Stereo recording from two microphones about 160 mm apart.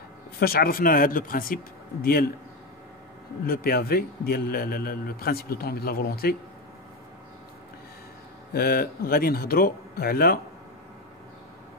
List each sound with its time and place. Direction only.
0.4 s speech: 70° left (ahead or behind)
3.4 s a man's voice: 65° left (ahead or behind)
8.5 s a man's voice: 70° left (ahead or behind)